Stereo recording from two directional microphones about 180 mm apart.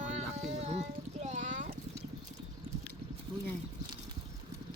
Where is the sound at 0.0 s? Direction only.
40° right (ahead or behind).